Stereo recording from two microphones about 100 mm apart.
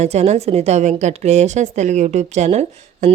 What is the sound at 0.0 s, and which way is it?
Speech, 90° right.